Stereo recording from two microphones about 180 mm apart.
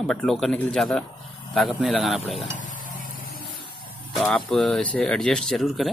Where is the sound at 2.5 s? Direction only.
45° left (ahead or behind).